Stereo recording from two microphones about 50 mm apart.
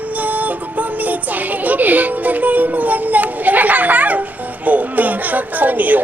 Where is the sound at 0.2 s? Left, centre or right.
Right.